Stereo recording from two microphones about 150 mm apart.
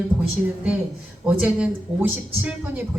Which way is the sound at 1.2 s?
10° right (ahead or behind).